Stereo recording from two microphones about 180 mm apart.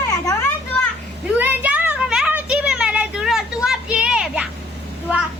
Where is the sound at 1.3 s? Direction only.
10° right (ahead or behind).